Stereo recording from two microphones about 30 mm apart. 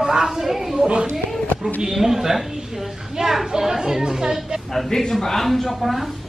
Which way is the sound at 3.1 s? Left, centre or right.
Right.